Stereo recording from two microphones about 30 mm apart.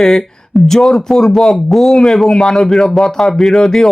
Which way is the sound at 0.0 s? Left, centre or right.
Centre.